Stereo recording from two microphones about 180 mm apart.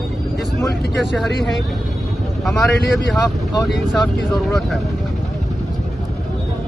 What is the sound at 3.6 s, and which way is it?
Speech, centre (ahead or behind).